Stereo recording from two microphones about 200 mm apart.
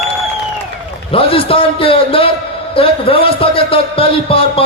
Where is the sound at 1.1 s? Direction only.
25° left (ahead or behind).